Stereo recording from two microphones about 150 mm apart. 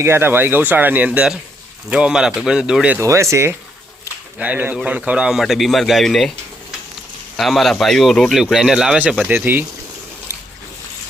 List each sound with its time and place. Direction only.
0.0 s a man's voice: 15° right (ahead or behind)
3.1 s a man's voice: 20° right (ahead or behind); by 6.3 s centre (ahead or behind)
7.3 s a man's voice: centre (ahead or behind)